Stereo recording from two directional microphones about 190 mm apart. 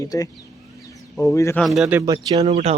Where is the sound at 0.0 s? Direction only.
20° left (ahead or behind).